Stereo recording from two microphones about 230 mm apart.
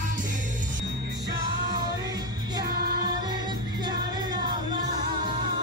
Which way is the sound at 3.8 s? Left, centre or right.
Centre.